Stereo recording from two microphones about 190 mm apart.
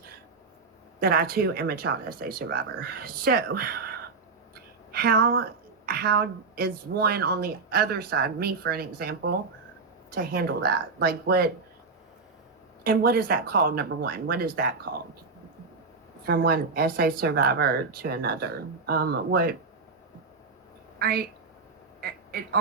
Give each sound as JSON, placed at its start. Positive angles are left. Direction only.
{"t": 0.9, "sound": "a woman's voice", "side_deg": -55}
{"t": 12.8, "sound": "speech", "side_deg": -50}
{"t": 16.2, "sound": "speech", "side_deg": -55}
{"t": 21.0, "sound": "speech", "side_deg": -50}
{"t": 22.0, "sound": "quack", "side_deg": -55}